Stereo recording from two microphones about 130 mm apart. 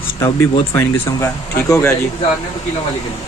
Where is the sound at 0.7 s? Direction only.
20° left (ahead or behind).